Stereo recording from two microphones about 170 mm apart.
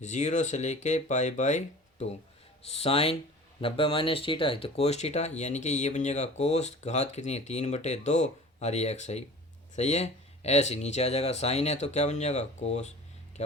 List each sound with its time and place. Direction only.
0.0 s speech: 45° left (ahead or behind)